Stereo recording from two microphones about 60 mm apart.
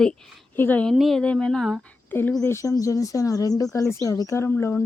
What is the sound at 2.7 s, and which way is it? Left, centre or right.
Speech, left.